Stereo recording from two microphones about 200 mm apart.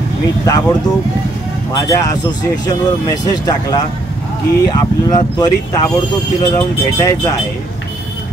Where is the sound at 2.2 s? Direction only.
20° left (ahead or behind).